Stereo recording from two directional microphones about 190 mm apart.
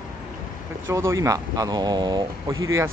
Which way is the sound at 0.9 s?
15° right (ahead or behind).